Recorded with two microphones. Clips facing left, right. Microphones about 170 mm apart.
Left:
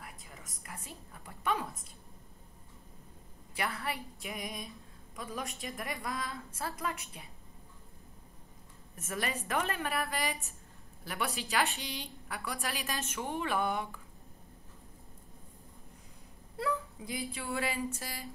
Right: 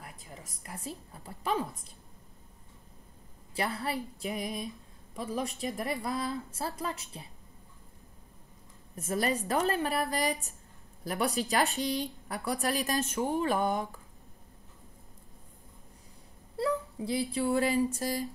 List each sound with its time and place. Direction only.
0.0 s a woman's voice: 35° right (ahead or behind)
3.5 s a woman's voice: 35° right (ahead or behind)
8.9 s a woman's voice: 35° right (ahead or behind)
16.5 s speech: 30° right (ahead or behind)